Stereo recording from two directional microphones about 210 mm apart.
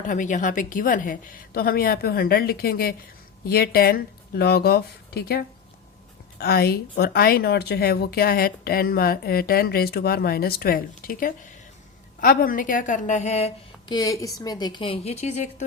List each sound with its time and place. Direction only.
0.0 s speech: 40° left (ahead or behind)
6.4 s a woman's voice: 50° left (ahead or behind); by 15.6 s 30° left (ahead or behind)